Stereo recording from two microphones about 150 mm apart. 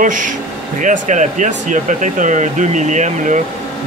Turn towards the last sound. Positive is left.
turn(degrees=-55)  # may be behind; listen again after turning